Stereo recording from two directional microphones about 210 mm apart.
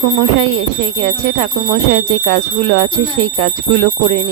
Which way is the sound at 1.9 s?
50° right (ahead or behind).